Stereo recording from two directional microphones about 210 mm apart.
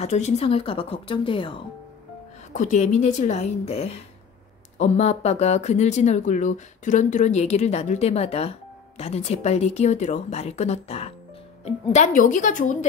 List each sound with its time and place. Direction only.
0.0 s a woman's voice: 30° left (ahead or behind)
2.5 s speech: 35° left (ahead or behind)